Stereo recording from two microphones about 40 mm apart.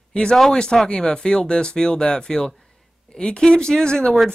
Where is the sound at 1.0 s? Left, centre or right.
Left.